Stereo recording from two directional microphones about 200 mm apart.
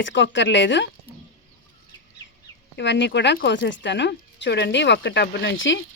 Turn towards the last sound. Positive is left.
turn(degrees=65)  # may be behind; listen again after turning